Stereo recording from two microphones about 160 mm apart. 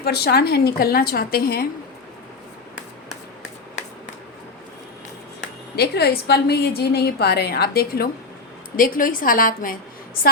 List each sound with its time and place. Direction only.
0.0 s a woman's voice: 85° left; by 1.6 s 70° left (ahead or behind)
5.7 s a woman's voice: 90° left; by 8.1 s 75° left (ahead or behind)
8.7 s a woman's voice: 60° left (ahead or behind)